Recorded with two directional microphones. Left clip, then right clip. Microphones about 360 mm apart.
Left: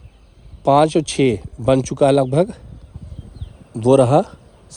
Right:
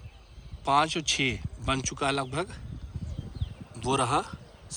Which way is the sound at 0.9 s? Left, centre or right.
Centre.